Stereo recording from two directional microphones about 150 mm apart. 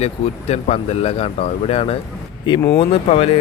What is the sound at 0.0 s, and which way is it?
Speech, 45° left (ahead or behind).